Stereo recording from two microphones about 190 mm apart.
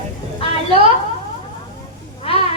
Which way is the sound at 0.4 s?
30° left (ahead or behind).